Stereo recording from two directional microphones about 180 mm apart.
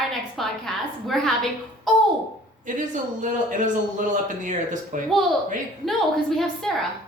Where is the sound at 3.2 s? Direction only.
45° right (ahead or behind).